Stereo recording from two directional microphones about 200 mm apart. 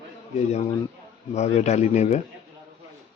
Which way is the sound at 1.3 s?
35° left (ahead or behind).